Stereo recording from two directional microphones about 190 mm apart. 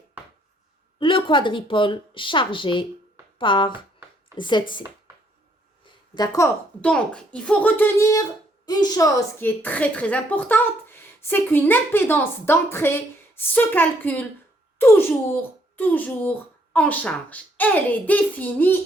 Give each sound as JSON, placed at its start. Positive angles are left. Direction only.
{"t": 0.9, "sound": "a woman's voice", "side_deg": 25}
{"t": 6.1, "sound": "speech", "side_deg": 20}
{"t": 6.8, "sound": "a child's voice", "side_deg": 5}